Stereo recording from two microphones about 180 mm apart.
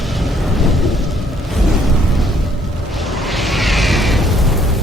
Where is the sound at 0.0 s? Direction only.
Centre (ahead or behind).